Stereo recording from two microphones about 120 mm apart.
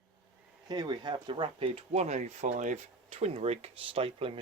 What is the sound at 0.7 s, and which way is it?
Speech, 35° right (ahead or behind).